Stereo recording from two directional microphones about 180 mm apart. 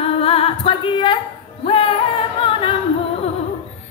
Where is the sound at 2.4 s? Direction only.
30° left (ahead or behind).